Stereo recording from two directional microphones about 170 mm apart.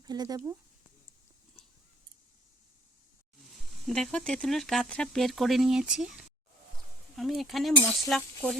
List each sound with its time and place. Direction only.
0.0 s speech: 25° right (ahead or behind)
3.8 s speech: 5° left (ahead or behind)